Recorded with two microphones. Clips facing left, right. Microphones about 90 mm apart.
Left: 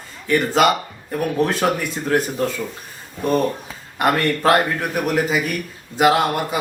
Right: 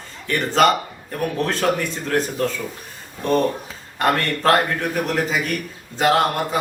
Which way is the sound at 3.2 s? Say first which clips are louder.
Even; 10° left (ahead or behind).